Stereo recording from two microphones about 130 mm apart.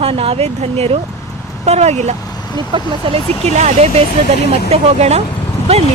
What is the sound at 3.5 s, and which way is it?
Speech, 60° right (ahead or behind).